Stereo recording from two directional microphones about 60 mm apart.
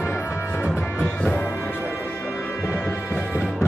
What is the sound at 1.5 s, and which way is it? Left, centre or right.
Music, left.